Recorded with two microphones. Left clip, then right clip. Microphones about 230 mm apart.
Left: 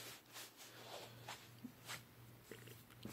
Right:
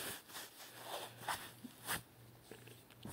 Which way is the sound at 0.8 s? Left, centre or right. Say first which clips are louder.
Right 10 dB; right.